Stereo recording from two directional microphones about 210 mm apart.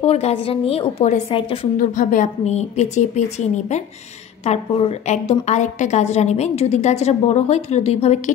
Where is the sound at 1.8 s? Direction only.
35° left (ahead or behind).